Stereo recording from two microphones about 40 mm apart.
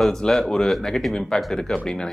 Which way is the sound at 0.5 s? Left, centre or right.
Centre.